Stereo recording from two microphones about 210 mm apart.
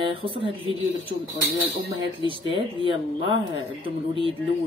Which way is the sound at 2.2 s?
25° right (ahead or behind).